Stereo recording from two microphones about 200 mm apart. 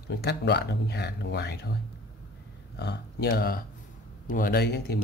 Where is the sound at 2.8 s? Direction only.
55° left (ahead or behind).